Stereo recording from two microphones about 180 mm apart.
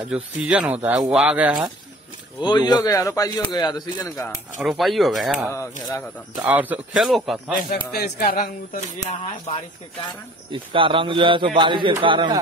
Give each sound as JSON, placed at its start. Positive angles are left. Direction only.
{"t": 0.1, "sound": "speech", "side_deg": -5}
{"t": 2.4, "sound": "a man's voice", "side_deg": 25}
{"t": 4.6, "sound": "speech", "side_deg": 0}
{"t": 5.5, "sound": "speech", "side_deg": 15}
{"t": 6.4, "sound": "speech", "side_deg": -10}
{"t": 7.7, "sound": "speech", "side_deg": 60}
{"t": 10.5, "sound": "a man's voice", "side_deg": -30}